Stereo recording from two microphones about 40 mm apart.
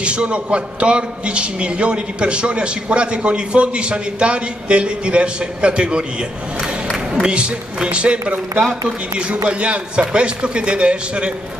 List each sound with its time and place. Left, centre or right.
0.0 s a man's voice: right
7.2 s a man's voice: right